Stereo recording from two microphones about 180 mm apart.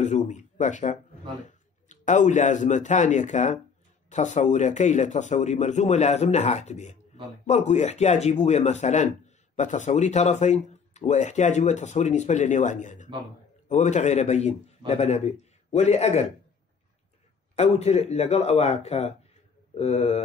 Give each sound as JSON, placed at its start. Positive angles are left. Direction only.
{"t": 0.0, "sound": "a man's voice", "side_deg": 40}
{"t": 17.6, "sound": "speech", "side_deg": 35}